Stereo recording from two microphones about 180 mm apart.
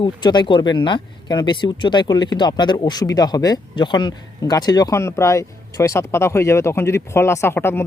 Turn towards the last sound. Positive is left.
turn(degrees=15)  # may be behind; listen again after turning